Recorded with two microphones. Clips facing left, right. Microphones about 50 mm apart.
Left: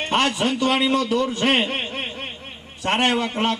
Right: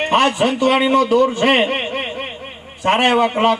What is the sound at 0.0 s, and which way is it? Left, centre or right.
A man's voice, right.